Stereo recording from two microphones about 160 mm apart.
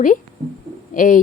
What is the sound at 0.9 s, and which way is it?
Speech, 55° left (ahead or behind).